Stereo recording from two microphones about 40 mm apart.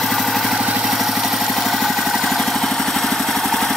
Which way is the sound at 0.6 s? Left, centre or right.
Centre.